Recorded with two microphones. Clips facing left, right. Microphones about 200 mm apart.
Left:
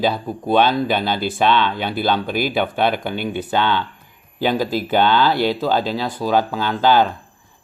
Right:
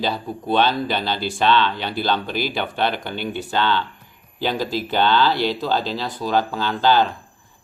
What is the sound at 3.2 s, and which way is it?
Speech, 50° left (ahead or behind).